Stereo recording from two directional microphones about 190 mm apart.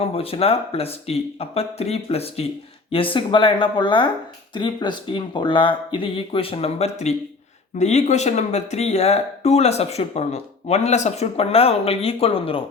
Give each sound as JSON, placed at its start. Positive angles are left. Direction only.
{"t": 0.0, "sound": "speech", "side_deg": 30}